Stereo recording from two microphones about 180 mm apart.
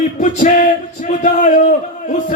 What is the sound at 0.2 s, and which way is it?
Speech, 45° left (ahead or behind).